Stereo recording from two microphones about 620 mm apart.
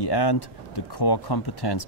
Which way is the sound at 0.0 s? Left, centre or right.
Left.